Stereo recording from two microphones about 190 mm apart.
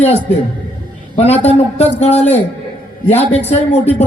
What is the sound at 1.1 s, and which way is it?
A man's voice, 35° left (ahead or behind).